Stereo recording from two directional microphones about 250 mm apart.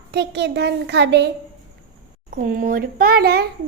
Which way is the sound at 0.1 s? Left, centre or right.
Right.